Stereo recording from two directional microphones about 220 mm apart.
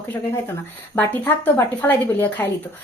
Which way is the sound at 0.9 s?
10° left (ahead or behind).